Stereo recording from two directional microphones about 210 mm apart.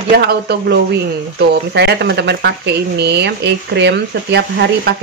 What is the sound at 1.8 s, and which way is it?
Speech, 50° right (ahead or behind).